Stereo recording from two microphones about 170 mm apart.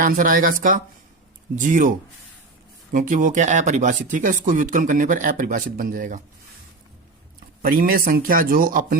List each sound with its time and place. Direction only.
0.0 s speech: 55° right (ahead or behind)
2.9 s speech: 50° right (ahead or behind)
7.6 s speech: 60° right (ahead or behind)